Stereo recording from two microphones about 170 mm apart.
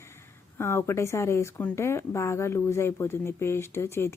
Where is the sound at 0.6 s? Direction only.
15° left (ahead or behind).